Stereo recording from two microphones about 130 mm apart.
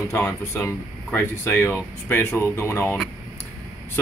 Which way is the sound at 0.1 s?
20° left (ahead or behind).